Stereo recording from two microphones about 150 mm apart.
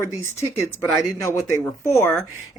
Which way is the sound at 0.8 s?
15° left (ahead or behind).